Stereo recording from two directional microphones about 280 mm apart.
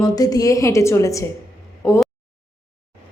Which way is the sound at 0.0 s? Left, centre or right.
Centre.